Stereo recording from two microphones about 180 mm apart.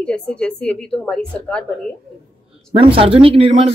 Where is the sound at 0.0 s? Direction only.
5° left (ahead or behind).